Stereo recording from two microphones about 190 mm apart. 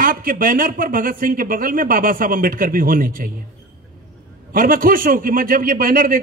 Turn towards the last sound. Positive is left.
turn(degrees=-45)  # may be behind; listen again after turning